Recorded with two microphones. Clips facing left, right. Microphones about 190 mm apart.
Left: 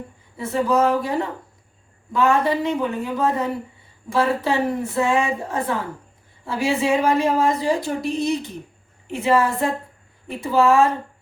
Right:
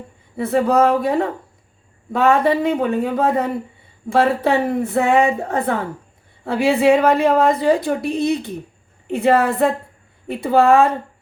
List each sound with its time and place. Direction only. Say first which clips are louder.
0.3 s a woman's voice: right 4 dB; 60° right (ahead or behind)